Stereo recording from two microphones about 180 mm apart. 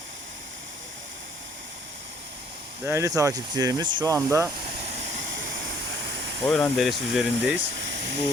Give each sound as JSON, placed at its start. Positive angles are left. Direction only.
{"t": 2.8, "sound": "speech", "side_deg": -15}
{"t": 6.4, "sound": "speech", "side_deg": 5}